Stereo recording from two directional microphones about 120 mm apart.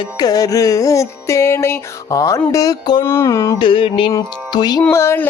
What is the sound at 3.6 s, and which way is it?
Music, 45° left (ahead or behind).